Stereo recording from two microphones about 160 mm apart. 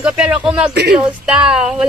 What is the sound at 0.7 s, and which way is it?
Speech, 90° right.